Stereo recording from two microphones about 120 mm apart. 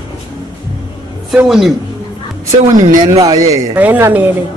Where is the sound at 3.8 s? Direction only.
15° right (ahead or behind).